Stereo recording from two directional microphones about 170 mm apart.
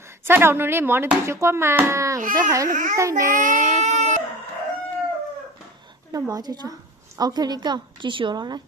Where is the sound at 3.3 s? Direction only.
50° right (ahead or behind).